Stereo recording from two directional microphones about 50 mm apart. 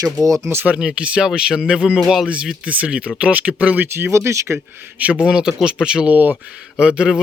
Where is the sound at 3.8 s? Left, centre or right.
Right.